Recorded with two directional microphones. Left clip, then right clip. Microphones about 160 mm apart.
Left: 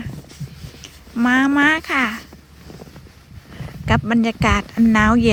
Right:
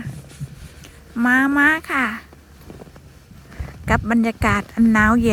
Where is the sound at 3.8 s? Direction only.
10° right (ahead or behind).